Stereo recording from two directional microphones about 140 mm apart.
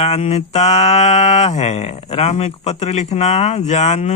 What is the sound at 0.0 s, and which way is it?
Mantra, 50° left (ahead or behind).